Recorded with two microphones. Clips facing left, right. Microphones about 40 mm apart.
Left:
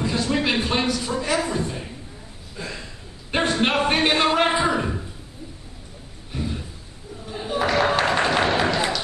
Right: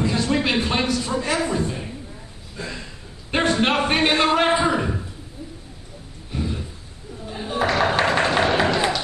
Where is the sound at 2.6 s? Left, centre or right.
Centre.